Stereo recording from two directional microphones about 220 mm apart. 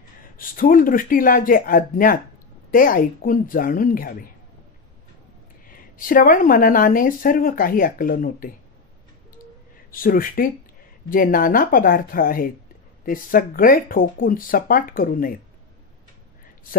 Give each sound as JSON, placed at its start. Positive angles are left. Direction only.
{"t": 0.4, "sound": "speech", "side_deg": 40}
{"t": 5.7, "sound": "speech", "side_deg": 40}
{"t": 9.8, "sound": "speech", "side_deg": 40}